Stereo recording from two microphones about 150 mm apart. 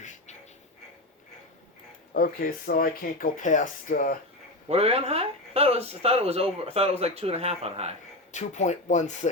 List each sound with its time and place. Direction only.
2.1 s speech: 80° left
4.7 s speech: 45° right (ahead or behind)
8.3 s speech: 50° left (ahead or behind)